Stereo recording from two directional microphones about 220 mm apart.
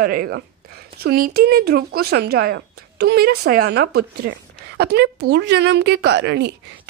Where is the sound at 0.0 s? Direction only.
45° right (ahead or behind).